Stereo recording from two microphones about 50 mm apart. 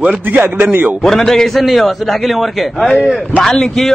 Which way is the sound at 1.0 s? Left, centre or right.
Centre.